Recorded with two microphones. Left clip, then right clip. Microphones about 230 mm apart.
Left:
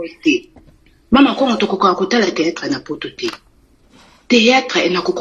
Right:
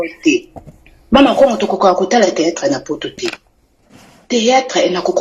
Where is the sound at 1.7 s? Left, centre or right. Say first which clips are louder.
Right 3 dB; left.